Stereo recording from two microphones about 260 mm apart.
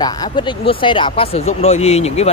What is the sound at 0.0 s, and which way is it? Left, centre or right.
Speech, centre.